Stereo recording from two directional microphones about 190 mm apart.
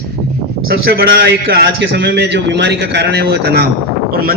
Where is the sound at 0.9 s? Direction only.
55° right (ahead or behind).